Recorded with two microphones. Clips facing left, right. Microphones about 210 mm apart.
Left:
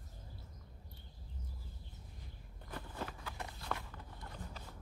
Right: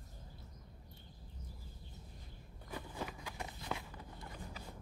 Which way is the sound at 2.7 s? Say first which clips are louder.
Right 1 dB; 10° right (ahead or behind).